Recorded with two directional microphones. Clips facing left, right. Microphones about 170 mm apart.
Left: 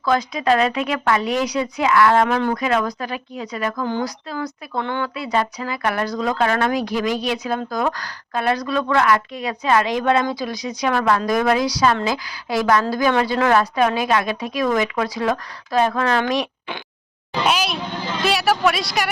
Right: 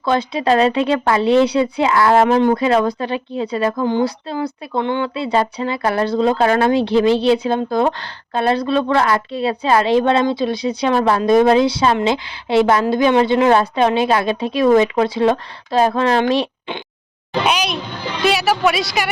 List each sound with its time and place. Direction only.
0.0 s speech: 30° right (ahead or behind)
17.4 s speech: centre (ahead or behind)